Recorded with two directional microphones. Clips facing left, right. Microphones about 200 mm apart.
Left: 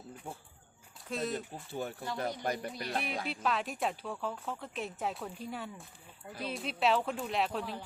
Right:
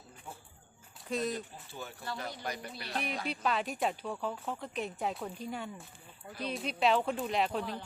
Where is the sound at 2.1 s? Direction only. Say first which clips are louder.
Left 6 dB; 50° left (ahead or behind).